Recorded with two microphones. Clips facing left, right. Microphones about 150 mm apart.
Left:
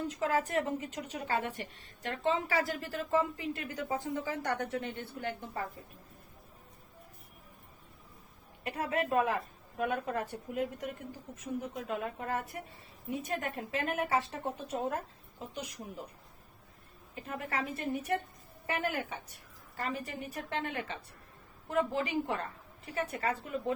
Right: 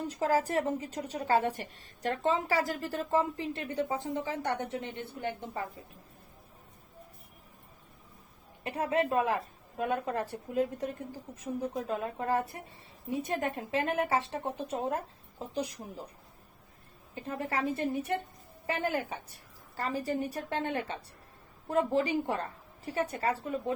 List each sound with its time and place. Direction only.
0.1 s a woman's voice: 35° right (ahead or behind); by 5.3 s 20° right (ahead or behind)
8.6 s a woman's voice: 30° right (ahead or behind)
17.2 s a woman's voice: 30° right (ahead or behind)